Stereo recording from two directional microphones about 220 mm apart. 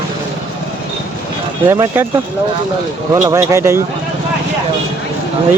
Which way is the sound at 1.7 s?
10° right (ahead or behind).